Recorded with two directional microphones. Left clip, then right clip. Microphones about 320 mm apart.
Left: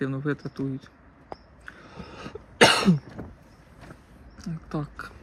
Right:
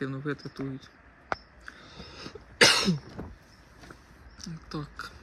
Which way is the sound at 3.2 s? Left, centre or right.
Right.